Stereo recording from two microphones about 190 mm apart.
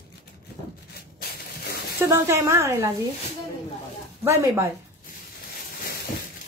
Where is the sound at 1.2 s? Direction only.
55° left (ahead or behind).